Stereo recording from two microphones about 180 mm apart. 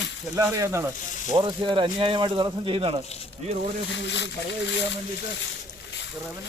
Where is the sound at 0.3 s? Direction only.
15° right (ahead or behind).